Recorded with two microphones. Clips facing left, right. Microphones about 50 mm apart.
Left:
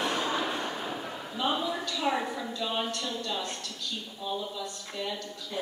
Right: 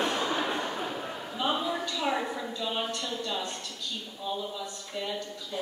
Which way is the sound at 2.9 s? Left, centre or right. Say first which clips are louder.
Even; centre.